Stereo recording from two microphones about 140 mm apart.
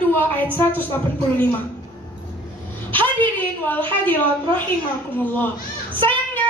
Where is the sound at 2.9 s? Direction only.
35° right (ahead or behind).